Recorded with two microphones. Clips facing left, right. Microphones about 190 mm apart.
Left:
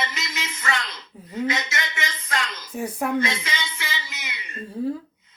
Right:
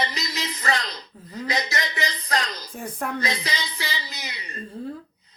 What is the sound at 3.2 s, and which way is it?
Speech, 35° right (ahead or behind).